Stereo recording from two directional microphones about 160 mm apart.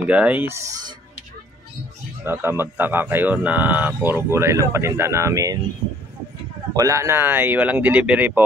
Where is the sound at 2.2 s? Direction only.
15° right (ahead or behind).